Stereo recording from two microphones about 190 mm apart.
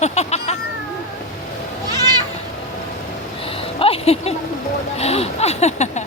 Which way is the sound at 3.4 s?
30° left (ahead or behind).